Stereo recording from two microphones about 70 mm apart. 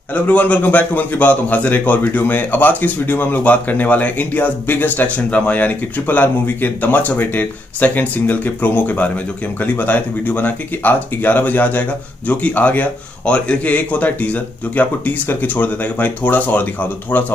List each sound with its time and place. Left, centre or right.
0.1 s a man's voice: left